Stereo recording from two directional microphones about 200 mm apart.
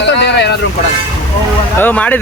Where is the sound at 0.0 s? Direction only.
60° left (ahead or behind).